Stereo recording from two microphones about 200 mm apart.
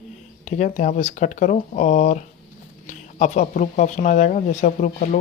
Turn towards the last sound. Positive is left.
turn(degrees=40)  # may be behind; listen again after turning